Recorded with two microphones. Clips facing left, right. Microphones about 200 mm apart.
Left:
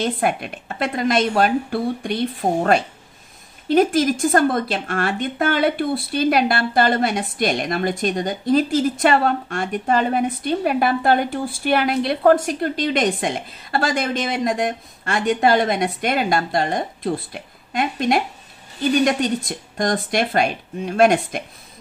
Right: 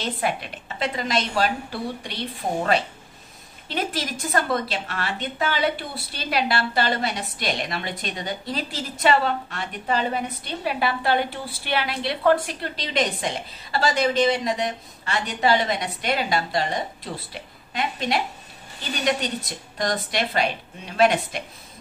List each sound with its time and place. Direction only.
0.0 s a woman's voice: 50° left (ahead or behind)